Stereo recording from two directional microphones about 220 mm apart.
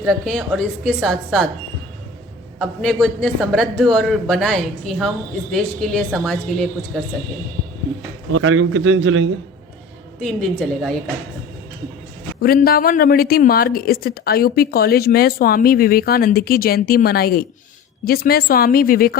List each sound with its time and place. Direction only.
0.0 s a man's voice: centre (ahead or behind)
2.6 s a man's voice: centre (ahead or behind)
8.3 s a man's voice: 65° right (ahead or behind)
10.2 s a man's voice: centre (ahead or behind)
12.4 s a woman's voice: 45° left (ahead or behind)